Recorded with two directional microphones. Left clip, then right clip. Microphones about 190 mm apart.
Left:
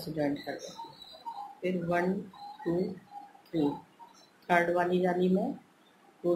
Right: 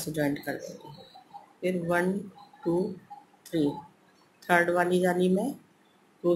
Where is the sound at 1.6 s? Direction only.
30° right (ahead or behind).